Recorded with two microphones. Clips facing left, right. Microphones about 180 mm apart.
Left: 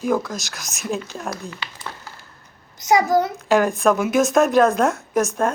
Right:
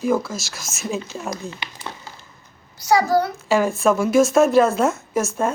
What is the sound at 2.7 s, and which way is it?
Speech, 20° left (ahead or behind).